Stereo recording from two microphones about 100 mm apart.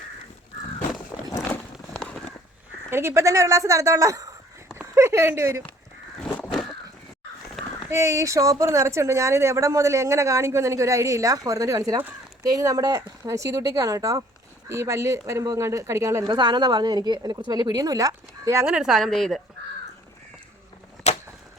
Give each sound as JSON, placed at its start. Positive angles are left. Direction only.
{"t": 1.9, "sound": "a sound", "side_deg": 5}
{"t": 2.9, "sound": "speech", "side_deg": -25}
{"t": 7.9, "sound": "speech", "side_deg": -35}
{"t": 16.2, "sound": "a woman's voice", "side_deg": -50}
{"t": 18.6, "sound": "a woman's voice", "side_deg": -5}
{"t": 21.1, "sound": "a sound", "side_deg": 90}